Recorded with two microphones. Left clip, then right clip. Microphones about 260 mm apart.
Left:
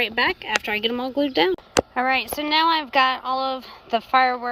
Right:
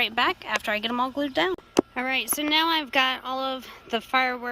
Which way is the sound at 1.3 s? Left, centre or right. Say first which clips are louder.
Left 4 dB; centre.